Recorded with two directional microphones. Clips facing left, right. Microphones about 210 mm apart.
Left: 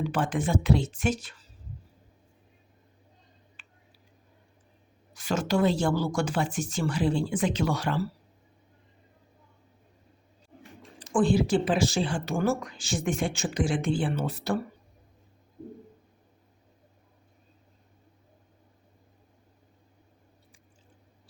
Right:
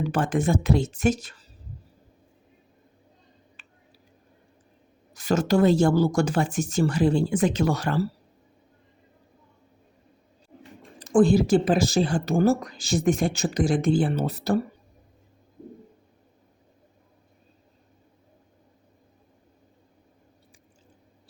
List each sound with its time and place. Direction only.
0.1 s a woman's voice: 45° right (ahead or behind)
3.6 s tick-tock: 40° right (ahead or behind)
5.1 s a woman's voice: 40° right (ahead or behind)
11.1 s speech: 40° right (ahead or behind)